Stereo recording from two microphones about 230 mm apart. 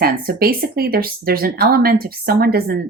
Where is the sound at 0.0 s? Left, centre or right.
Right.